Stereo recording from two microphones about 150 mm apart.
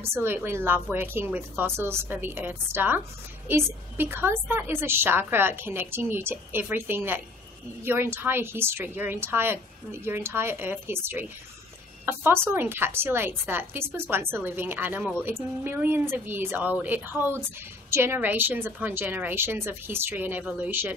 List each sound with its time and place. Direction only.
0.1 s a woman's voice: 15° right (ahead or behind)